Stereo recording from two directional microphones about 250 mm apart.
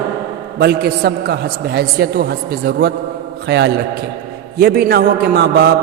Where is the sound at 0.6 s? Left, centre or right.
Right.